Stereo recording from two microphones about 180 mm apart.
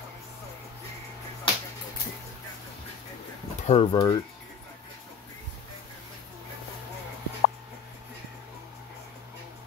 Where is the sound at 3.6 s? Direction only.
30° left (ahead or behind).